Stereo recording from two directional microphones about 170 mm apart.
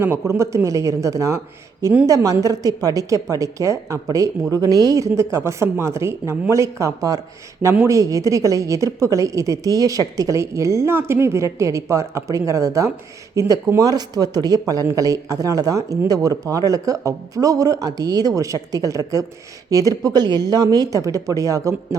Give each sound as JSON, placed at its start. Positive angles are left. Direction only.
{"t": 0.0, "sound": "a woman's voice", "side_deg": -15}
{"t": 2.0, "sound": "a woman's voice", "side_deg": -20}